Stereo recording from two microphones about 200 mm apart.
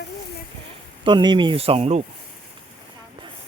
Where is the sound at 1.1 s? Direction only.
25° right (ahead or behind).